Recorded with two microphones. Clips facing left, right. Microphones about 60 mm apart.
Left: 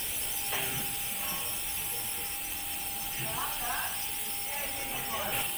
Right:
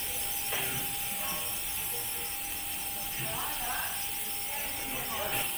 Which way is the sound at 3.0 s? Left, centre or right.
Centre.